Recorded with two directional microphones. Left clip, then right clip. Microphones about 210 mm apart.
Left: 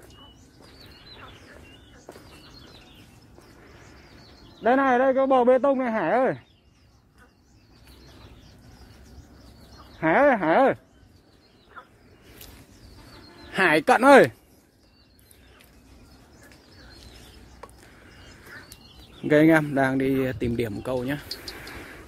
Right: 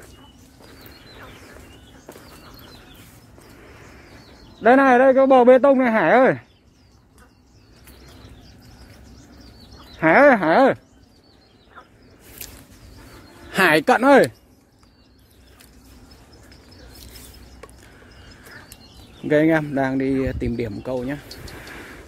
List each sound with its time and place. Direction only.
2.1 s bird flight: 15° right (ahead or behind)
4.6 s speech: 20° right (ahead or behind)
9.9 s a sound: 20° right (ahead or behind)
12.4 s a sound: 35° right (ahead or behind)
13.5 s speech: 10° right (ahead or behind); by 14.3 s 10° left (ahead or behind)
19.2 s speech: 15° left (ahead or behind)